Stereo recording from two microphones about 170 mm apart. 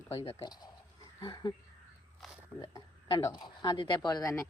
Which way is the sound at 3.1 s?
25° left (ahead or behind).